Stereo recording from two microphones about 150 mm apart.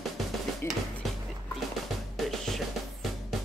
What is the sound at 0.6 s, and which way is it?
Speech, 15° left (ahead or behind).